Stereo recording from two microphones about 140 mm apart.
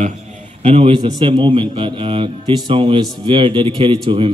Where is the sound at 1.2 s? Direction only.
40° right (ahead or behind).